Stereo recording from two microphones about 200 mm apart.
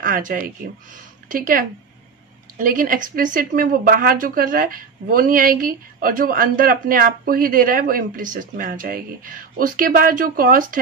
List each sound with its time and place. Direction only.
0.0 s speech: 45° right (ahead or behind)